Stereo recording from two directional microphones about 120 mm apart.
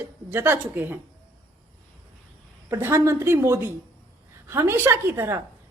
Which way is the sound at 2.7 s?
20° right (ahead or behind).